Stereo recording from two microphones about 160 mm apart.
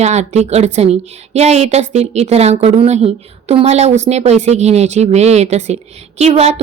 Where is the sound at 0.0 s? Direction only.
45° right (ahead or behind).